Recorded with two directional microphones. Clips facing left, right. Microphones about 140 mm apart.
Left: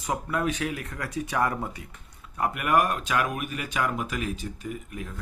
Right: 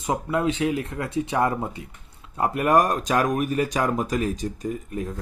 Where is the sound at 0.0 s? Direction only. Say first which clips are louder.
Right 4 dB; 25° right (ahead or behind).